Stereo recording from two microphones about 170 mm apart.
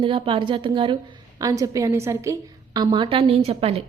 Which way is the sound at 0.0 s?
30° right (ahead or behind).